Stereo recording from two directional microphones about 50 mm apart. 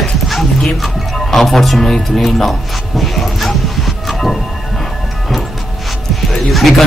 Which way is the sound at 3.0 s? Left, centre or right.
Centre.